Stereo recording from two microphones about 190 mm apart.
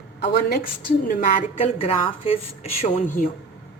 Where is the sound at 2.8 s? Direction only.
40° left (ahead or behind).